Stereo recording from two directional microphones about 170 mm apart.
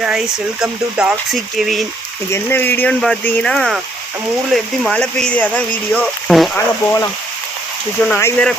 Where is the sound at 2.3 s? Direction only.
15° left (ahead or behind).